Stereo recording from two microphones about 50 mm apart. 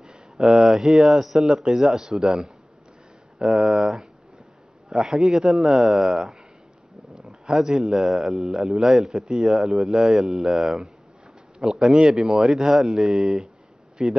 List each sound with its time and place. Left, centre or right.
0.0 s a man's voice: centre
7.1 s dog: centre
7.4 s a man's voice: centre